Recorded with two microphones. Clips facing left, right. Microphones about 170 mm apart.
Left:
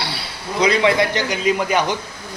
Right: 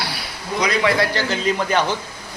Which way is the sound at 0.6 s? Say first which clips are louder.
Left 3 dB; 25° left (ahead or behind).